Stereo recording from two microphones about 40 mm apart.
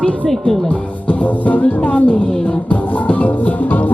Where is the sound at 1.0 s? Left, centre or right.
Left.